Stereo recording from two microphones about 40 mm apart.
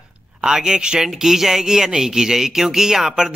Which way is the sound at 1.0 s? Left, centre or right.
Centre.